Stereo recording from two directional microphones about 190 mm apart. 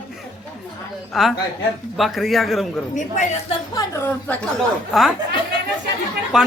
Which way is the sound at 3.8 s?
15° left (ahead or behind).